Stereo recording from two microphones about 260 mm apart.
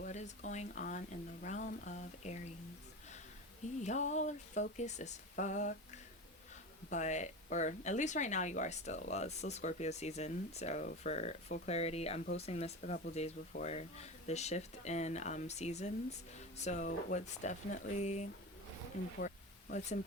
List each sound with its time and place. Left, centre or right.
0.0 s speech: left
3.8 s speech: left
6.9 s speech: left
19.2 s a sound: left